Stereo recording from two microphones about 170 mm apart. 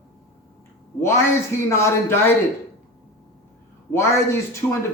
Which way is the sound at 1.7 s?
15° left (ahead or behind).